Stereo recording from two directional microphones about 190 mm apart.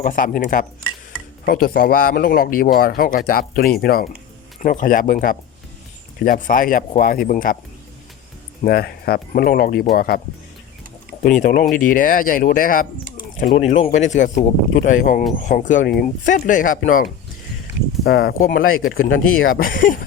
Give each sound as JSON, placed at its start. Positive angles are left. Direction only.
{"t": 0.0, "sound": "speech", "side_deg": 45}
{"t": 8.6, "sound": "speech", "side_deg": 55}
{"t": 11.2, "sound": "speech", "side_deg": 45}
{"t": 13.5, "sound": "speech", "side_deg": 35}
{"t": 18.0, "sound": "speech", "side_deg": 60}
{"t": 18.6, "sound": "speech", "side_deg": 90}
{"t": 19.5, "sound": "speech", "side_deg": 50}